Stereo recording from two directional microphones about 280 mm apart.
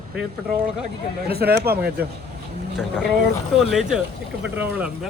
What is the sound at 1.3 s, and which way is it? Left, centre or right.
Speech, right.